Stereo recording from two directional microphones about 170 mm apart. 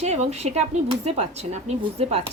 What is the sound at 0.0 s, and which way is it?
Speech, 40° right (ahead or behind).